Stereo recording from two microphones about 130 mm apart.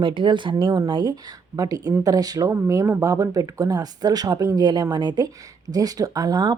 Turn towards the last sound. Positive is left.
turn(degrees=-30)  # may be behind; listen again after turning